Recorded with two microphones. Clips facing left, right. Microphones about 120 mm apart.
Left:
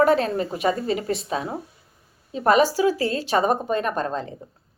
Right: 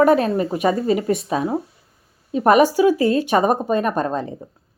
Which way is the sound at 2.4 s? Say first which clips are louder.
Right 4 dB; 15° right (ahead or behind).